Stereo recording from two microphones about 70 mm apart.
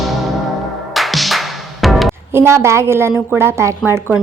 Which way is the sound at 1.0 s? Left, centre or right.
Centre.